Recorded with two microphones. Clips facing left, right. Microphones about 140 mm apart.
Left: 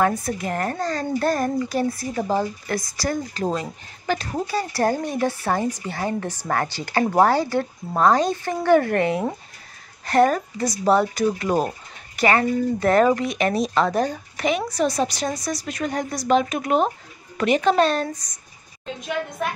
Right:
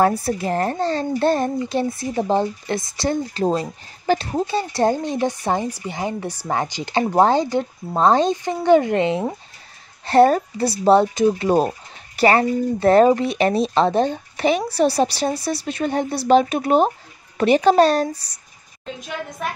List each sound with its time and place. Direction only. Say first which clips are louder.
0.0 s a child's voice: right 3 dB; 35° right (ahead or behind)
10.0 s a child's voice: right 4 dB; 30° right (ahead or behind)
19.4 s a woman's voice: right 1 dB; centre (ahead or behind)